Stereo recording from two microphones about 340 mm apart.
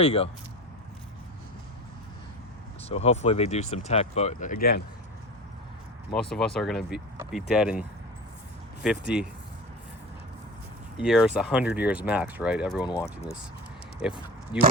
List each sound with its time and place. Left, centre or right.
0.0 s speech: centre
2.9 s speech: centre
6.3 s speech: centre
10.9 s speech: centre
12.8 s speech: centre
14.0 s speech: centre
14.5 s speech: centre